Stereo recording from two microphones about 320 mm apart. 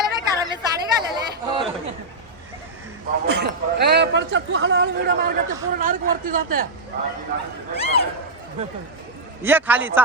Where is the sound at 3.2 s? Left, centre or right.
Right.